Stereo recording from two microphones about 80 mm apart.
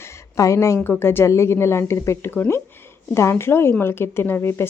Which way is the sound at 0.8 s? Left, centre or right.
Left.